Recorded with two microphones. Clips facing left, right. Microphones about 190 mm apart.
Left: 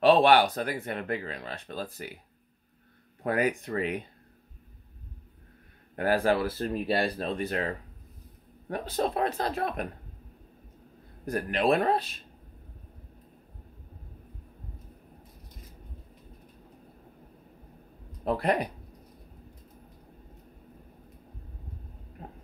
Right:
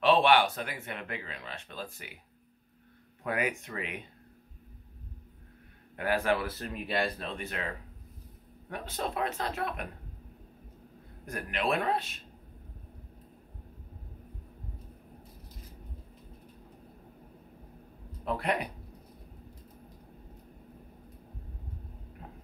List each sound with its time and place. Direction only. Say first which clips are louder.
0.0 s speech: left 4 dB; 40° left (ahead or behind)
3.3 s speech: left 5 dB; 35° left (ahead or behind)
5.9 s speech: left 4 dB; 35° left (ahead or behind)
11.2 s speech: left 6 dB; 35° left (ahead or behind)
18.2 s speech: left 5 dB; 40° left (ahead or behind)